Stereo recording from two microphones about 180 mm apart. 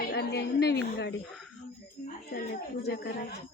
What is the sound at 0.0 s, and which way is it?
Speech, 65° left (ahead or behind).